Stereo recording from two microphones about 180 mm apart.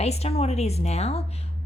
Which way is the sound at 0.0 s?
35° left (ahead or behind).